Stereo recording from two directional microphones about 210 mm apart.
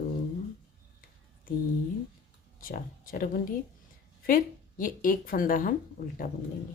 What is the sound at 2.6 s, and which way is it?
Speech, 40° left (ahead or behind).